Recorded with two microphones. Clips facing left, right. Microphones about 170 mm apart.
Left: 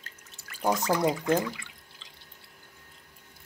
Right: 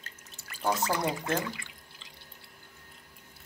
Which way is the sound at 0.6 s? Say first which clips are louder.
Left 3 dB; 15° left (ahead or behind).